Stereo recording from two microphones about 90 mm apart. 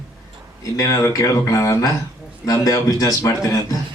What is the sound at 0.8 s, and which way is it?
A man's voice, 35° left (ahead or behind).